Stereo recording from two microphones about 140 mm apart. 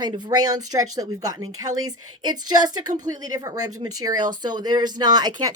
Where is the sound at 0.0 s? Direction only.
30° right (ahead or behind).